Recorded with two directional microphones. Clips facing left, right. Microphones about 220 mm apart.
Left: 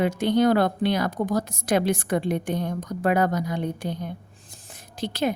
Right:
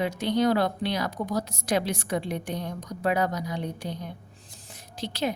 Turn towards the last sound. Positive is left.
turn(degrees=50)  # may be behind; listen again after turning